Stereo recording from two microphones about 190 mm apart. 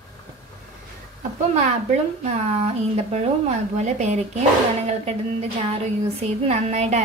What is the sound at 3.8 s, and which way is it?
A woman's voice, 35° right (ahead or behind).